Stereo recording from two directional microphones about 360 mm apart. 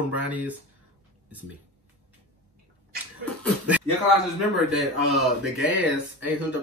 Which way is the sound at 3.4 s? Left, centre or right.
Centre.